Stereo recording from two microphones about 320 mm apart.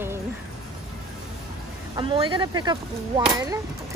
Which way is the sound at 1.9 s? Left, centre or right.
Centre.